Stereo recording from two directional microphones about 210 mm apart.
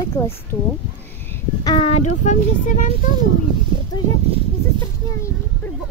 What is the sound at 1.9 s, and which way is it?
Speech, 35° left (ahead or behind).